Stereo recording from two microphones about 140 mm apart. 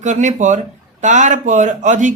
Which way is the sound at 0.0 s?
60° right (ahead or behind).